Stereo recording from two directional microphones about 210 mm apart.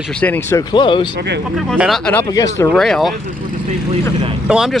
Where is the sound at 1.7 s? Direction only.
Centre (ahead or behind).